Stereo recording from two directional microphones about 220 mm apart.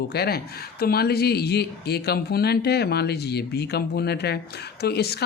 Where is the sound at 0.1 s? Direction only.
45° left (ahead or behind).